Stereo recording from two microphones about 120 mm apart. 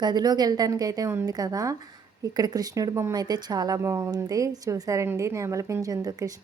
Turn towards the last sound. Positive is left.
turn(degrees=-30)  # may be behind; listen again after turning